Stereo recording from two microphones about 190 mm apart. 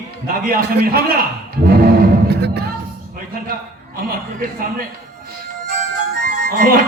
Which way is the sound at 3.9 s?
50° right (ahead or behind).